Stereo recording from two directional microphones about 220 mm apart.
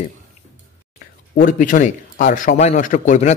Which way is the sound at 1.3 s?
35° left (ahead or behind).